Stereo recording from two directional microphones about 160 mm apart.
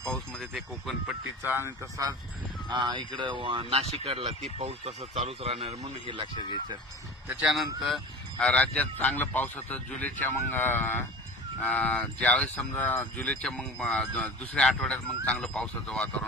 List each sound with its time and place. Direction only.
0.0 s speech: 5° left (ahead or behind)
1.4 s speech: 15° right (ahead or behind)
2.7 s speech: 30° right (ahead or behind)
7.2 s speech: centre (ahead or behind)